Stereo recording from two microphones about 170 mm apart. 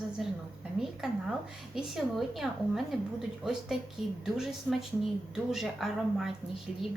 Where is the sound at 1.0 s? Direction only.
5° right (ahead or behind).